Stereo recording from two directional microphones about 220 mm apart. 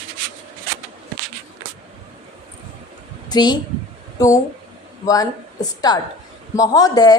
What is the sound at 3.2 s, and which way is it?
Speech, 20° left (ahead or behind).